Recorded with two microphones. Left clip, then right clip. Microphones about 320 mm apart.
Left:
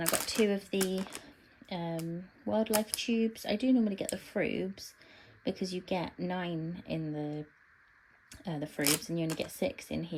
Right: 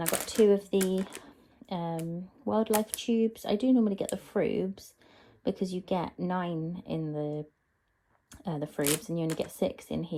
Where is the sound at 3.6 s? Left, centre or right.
Right.